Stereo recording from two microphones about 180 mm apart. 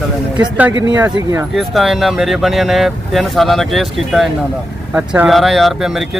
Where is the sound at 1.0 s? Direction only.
20° right (ahead or behind).